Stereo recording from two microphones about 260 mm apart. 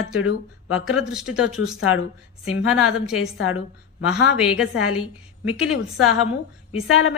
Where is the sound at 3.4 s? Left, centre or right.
Left.